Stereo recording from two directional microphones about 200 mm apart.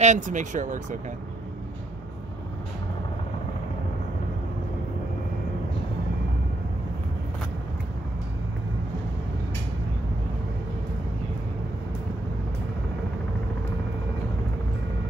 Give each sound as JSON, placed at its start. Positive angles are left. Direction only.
{"t": 0.0, "sound": "speech", "side_deg": -40}